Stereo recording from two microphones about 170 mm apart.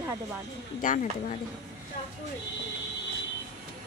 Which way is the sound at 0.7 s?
50° left (ahead or behind).